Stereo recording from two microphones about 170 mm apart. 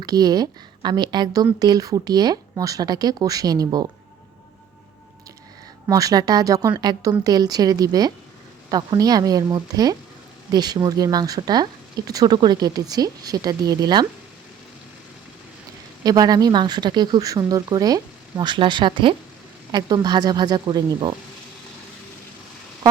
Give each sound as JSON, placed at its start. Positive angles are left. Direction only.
{"t": 0.0, "sound": "speech", "side_deg": -20}
{"t": 5.9, "sound": "speech", "side_deg": -20}
{"t": 16.0, "sound": "speech", "side_deg": -25}